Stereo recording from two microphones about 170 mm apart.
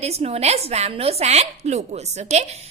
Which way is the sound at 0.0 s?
40° right (ahead or behind).